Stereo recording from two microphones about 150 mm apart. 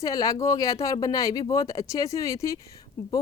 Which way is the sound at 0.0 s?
25° left (ahead or behind).